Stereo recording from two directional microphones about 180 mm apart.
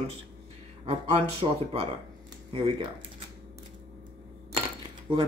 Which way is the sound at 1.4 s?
30° right (ahead or behind).